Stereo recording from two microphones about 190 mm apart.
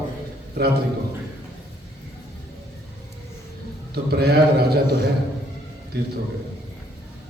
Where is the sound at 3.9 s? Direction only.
55° right (ahead or behind).